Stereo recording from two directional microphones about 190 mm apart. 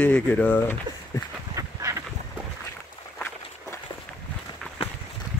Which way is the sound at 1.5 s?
15° right (ahead or behind).